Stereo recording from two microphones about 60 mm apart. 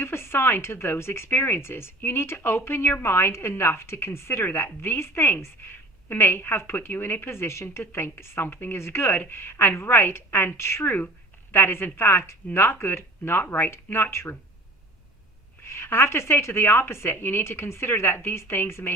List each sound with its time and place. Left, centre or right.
0.0 s a woman's voice: left
15.7 s speech: left